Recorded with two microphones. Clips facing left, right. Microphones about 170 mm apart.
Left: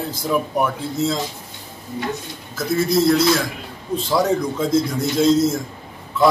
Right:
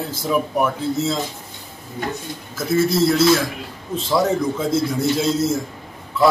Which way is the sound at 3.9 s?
5° right (ahead or behind).